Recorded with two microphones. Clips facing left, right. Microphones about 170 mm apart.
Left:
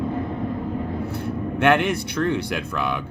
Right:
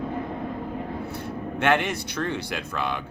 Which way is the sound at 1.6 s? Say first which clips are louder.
Left 4 dB; 55° left (ahead or behind).